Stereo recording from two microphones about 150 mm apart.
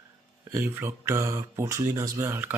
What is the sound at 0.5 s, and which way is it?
Speech, 15° right (ahead or behind).